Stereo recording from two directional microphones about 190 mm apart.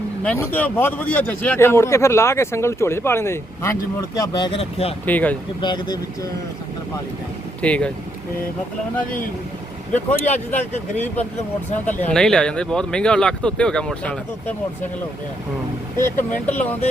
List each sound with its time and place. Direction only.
0.2 s speech: 10° left (ahead or behind)
4.4 s speech: 25° left (ahead or behind)
5.0 s speech: 10° left (ahead or behind)
5.5 s speech: 25° left (ahead or behind)
7.6 s speech: 5° left (ahead or behind)
10.2 s speech: 40° left (ahead or behind)
11.9 s speech: 5° left (ahead or behind)
16.0 s speech: 15° left (ahead or behind)